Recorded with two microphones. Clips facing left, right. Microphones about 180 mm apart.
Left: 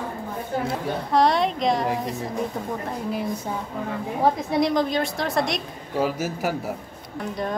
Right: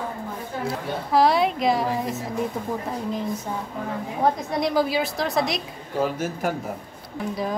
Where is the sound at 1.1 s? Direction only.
5° right (ahead or behind).